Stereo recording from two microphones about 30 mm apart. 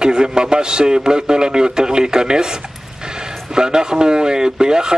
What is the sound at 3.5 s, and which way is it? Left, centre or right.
A man's voice, right.